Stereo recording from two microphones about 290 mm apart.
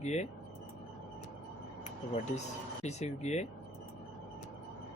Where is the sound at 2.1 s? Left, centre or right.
Left.